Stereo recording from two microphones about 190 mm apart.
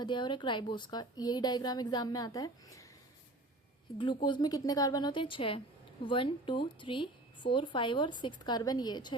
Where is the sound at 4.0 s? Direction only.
25° left (ahead or behind).